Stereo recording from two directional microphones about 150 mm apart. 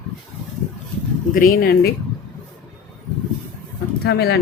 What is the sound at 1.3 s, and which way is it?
Speech, 65° left (ahead or behind).